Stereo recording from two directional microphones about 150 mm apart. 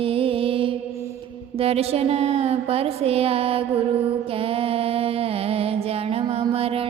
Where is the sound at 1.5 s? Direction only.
40° right (ahead or behind).